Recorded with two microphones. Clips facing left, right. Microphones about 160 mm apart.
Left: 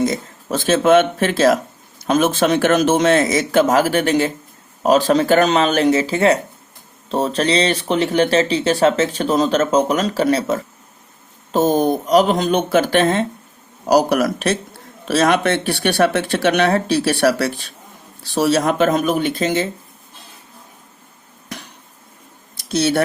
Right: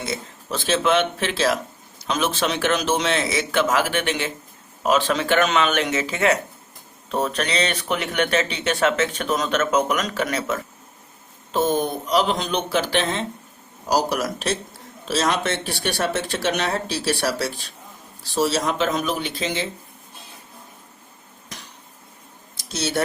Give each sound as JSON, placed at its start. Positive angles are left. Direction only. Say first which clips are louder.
{"t": 0.0, "sound": "speech", "louder": "left 10 dB", "side_deg": 45}
{"t": 13.8, "sound": "speech", "louder": "left 7 dB", "side_deg": 60}
{"t": 21.5, "sound": "dishes", "louder": "left 8 dB", "side_deg": 60}
{"t": 22.5, "sound": "speech", "louder": "left 7 dB", "side_deg": 60}